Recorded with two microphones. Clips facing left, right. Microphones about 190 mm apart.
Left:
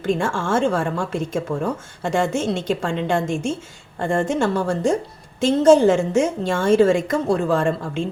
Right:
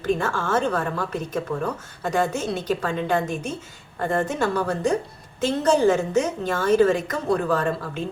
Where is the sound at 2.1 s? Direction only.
25° left (ahead or behind).